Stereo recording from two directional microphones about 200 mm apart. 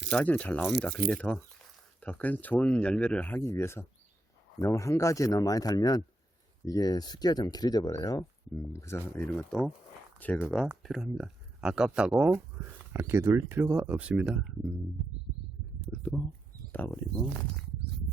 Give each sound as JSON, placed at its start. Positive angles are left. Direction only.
{"t": 0.1, "sound": "speech", "side_deg": 5}
{"t": 15.9, "sound": "a sound", "side_deg": 15}
{"t": 16.7, "sound": "speech", "side_deg": 10}